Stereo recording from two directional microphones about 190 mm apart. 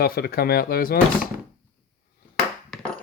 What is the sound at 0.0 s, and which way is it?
Speech, 55° left (ahead or behind).